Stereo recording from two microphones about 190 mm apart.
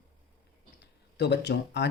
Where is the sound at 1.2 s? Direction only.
60° left (ahead or behind).